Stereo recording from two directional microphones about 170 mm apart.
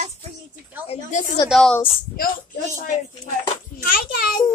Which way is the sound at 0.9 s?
45° left (ahead or behind).